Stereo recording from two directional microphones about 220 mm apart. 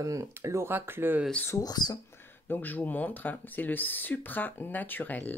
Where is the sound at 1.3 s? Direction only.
10° left (ahead or behind).